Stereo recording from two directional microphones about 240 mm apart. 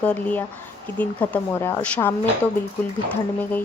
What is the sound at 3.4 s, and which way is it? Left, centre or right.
Speech, centre.